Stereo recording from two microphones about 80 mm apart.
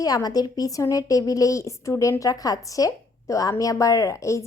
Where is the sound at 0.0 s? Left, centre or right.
Left.